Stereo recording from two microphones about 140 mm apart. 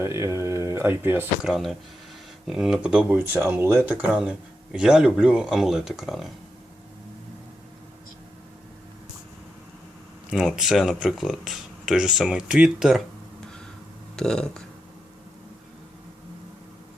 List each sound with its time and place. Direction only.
0.0 s speech: 20° right (ahead or behind)
1.4 s speech: 5° right (ahead or behind)
10.2 s speech: 5° right (ahead or behind)
14.2 s speech: 5° left (ahead or behind)